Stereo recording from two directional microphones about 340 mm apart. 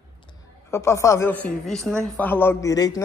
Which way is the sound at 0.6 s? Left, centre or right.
Centre.